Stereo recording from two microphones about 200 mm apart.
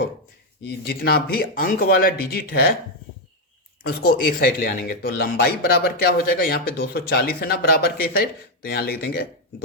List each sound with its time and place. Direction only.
0.6 s speech: 50° left (ahead or behind)
3.8 s speech: 45° left (ahead or behind)